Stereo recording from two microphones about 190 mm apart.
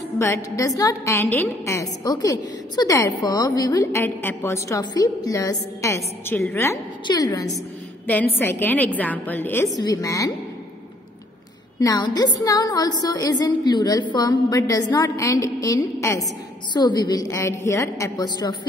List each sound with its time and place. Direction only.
0.2 s a woman's voice: 15° left (ahead or behind)
7.1 s a woman's voice: 20° left (ahead or behind)
8.1 s a woman's voice: 10° left (ahead or behind)
11.8 s a woman's voice: 20° left (ahead or behind)